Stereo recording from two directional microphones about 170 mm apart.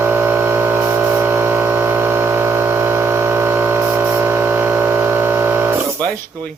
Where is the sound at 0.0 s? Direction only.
15° right (ahead or behind).